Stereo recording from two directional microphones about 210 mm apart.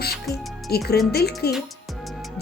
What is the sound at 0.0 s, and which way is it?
Music, 50° left (ahead or behind).